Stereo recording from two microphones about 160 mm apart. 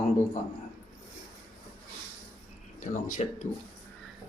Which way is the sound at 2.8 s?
50° left (ahead or behind).